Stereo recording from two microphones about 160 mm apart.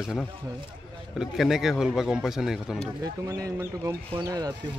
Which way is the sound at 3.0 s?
20° right (ahead or behind).